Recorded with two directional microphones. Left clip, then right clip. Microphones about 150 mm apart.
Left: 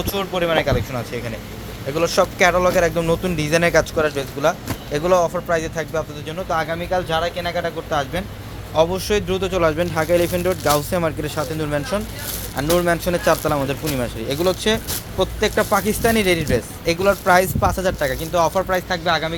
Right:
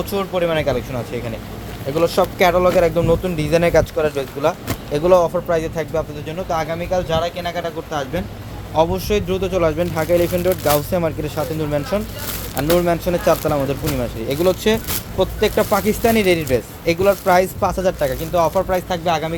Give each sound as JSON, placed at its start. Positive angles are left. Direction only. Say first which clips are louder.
{"t": 0.0, "sound": "speech", "louder": "right 2 dB", "side_deg": 0}
{"t": 2.0, "sound": "speech", "louder": "right 1 dB", "side_deg": -10}
{"t": 6.5, "sound": "speech", "louder": "even", "side_deg": 5}
{"t": 14.3, "sound": "speech", "louder": "right 2 dB", "side_deg": -15}
{"t": 18.8, "sound": "speech", "louder": "even", "side_deg": -15}